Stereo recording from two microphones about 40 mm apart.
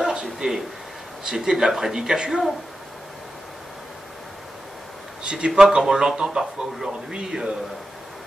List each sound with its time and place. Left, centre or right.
0.0 s a sound: centre
1.2 s a man's voice: centre
5.2 s a man's voice: right